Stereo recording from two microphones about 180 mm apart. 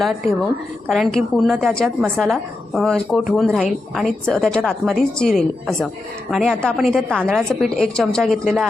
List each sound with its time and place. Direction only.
0.9 s a woman's voice: centre (ahead or behind)